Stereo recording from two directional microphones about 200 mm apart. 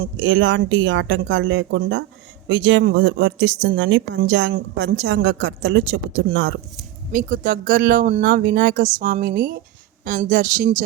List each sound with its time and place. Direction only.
0.2 s speech: 65° right (ahead or behind)
7.1 s speech: 45° right (ahead or behind)